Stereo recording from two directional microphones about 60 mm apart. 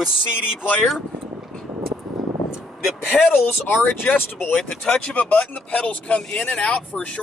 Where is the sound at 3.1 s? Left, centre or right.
Centre.